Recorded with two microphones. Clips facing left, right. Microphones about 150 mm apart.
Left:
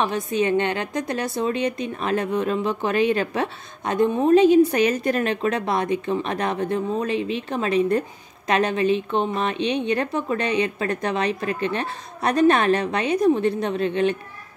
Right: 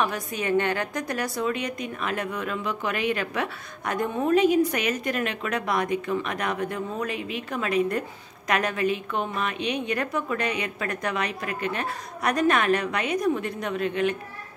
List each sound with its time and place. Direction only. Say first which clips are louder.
0.0 s a woman's voice: left 5 dB; 25° left (ahead or behind)